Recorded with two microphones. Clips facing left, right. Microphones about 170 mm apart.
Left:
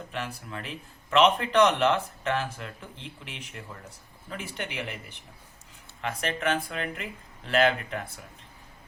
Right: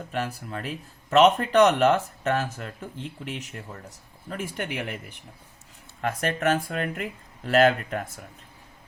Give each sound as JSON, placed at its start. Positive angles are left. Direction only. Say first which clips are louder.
{"t": 0.1, "sound": "speech", "louder": "right 6 dB", "side_deg": -45}